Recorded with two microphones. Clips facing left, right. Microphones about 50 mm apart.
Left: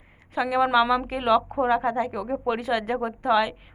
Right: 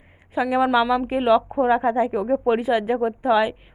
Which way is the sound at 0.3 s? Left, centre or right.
Centre.